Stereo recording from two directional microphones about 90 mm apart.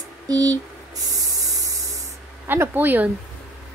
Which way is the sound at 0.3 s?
45° right (ahead or behind).